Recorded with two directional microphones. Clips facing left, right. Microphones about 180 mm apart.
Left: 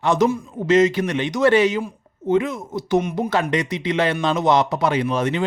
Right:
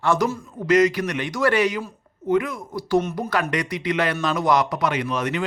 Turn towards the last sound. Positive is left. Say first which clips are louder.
# left 4 dB
turn(degrees=30)  # may be behind; listen again after turning